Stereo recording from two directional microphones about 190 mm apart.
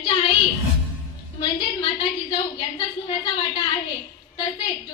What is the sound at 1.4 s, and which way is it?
A woman's voice, 25° left (ahead or behind).